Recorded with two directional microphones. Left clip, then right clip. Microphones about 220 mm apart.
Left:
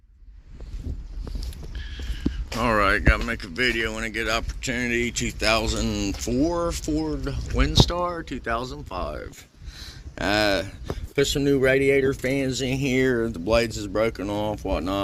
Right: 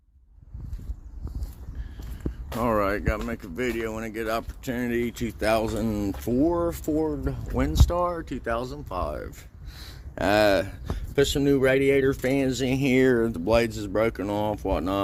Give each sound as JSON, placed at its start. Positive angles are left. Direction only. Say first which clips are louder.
{"t": 2.5, "sound": "speech", "louder": "left 4 dB", "side_deg": 0}
{"t": 9.7, "sound": "a sound", "louder": "right 1 dB", "side_deg": -20}
{"t": 11.1, "sound": "speech", "louder": "even", "side_deg": -5}
{"t": 12.2, "sound": "speech", "louder": "even", "side_deg": -25}
{"t": 13.5, "sound": "speech", "louder": "left 1 dB", "side_deg": -15}